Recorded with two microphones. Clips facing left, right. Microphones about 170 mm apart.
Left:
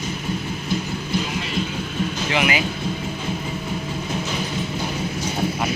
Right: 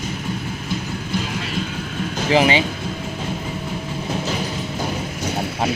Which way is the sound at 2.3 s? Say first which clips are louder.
Right 7 dB; 30° right (ahead or behind).